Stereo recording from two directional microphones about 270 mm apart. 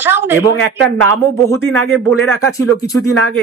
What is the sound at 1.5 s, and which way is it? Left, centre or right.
Speech, centre.